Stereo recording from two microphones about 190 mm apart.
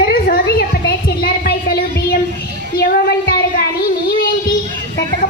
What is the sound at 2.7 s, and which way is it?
Child singing, 55° left (ahead or behind).